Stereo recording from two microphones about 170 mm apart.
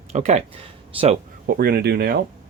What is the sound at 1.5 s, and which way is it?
Speech, 60° right (ahead or behind).